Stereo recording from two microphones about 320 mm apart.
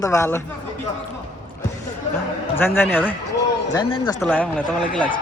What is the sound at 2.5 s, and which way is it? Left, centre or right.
A man's voice, centre.